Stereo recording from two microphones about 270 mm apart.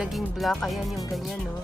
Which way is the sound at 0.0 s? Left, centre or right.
Centre.